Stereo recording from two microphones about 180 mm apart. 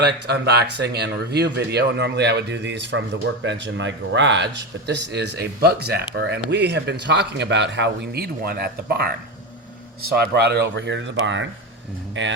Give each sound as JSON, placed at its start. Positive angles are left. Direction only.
{"t": 0.0, "sound": "speech", "side_deg": -65}